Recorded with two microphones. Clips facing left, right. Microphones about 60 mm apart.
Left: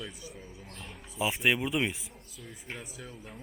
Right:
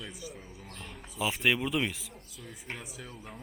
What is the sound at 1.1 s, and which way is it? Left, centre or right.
Speech, left.